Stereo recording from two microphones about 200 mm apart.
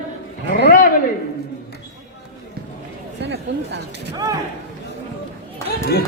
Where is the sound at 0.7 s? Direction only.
45° left (ahead or behind).